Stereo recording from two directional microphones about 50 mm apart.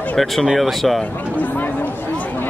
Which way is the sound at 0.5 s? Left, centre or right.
Centre.